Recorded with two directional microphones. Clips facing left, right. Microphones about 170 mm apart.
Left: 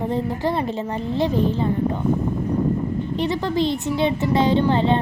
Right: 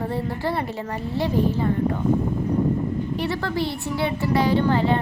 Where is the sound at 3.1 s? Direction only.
20° left (ahead or behind).